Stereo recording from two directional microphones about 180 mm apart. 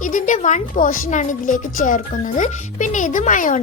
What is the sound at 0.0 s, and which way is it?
Speech, 45° left (ahead or behind).